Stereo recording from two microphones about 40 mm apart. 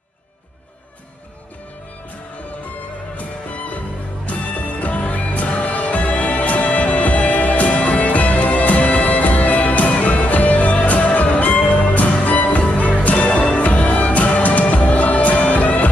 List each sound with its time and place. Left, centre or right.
4.3 s music: left